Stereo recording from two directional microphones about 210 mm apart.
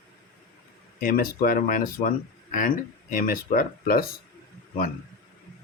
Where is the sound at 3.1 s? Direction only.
40° left (ahead or behind).